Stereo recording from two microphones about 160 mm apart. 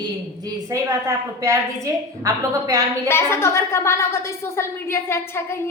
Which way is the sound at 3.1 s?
15° left (ahead or behind).